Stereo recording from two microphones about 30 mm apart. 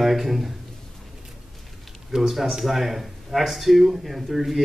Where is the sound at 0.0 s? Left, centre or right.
Centre.